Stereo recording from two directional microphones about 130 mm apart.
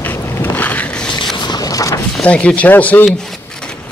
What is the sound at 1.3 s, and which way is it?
Vehicle, 30° left (ahead or behind).